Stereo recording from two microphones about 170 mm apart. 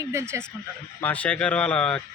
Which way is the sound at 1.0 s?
10° left (ahead or behind).